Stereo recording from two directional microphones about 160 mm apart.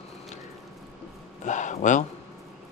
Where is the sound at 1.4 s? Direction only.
50° left (ahead or behind).